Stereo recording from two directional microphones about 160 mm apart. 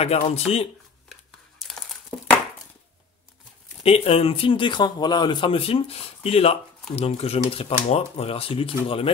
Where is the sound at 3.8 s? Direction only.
35° left (ahead or behind).